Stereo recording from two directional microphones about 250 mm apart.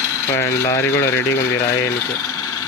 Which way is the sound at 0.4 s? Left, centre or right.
Centre.